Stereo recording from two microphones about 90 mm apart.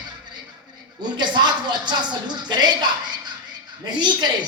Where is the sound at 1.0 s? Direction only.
55° right (ahead or behind).